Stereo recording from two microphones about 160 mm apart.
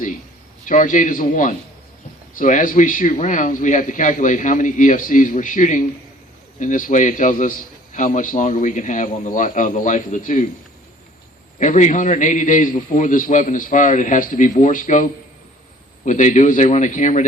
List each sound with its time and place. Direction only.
0.6 s a man's voice: 55° left (ahead or behind)
11.6 s a man's voice: 50° left (ahead or behind)